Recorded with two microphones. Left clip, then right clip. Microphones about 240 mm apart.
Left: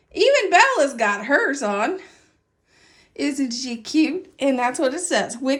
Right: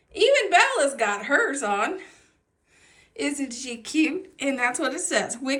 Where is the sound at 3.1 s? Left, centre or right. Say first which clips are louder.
Left 4 dB; centre.